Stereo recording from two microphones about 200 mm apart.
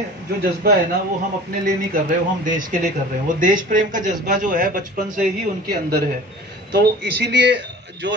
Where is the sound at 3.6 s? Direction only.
40° right (ahead or behind).